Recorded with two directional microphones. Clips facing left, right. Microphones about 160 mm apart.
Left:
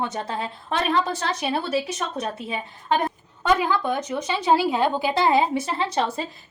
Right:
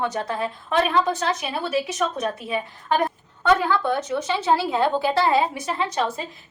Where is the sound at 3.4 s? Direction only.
15° left (ahead or behind).